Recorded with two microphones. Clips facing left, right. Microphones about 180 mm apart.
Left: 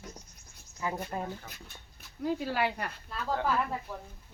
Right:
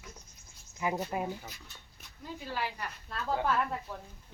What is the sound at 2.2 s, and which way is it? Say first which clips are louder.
Speech: left 8 dB; 70° left (ahead or behind).